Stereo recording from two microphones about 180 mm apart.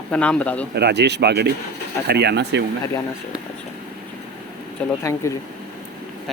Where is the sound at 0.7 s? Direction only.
65° right (ahead or behind).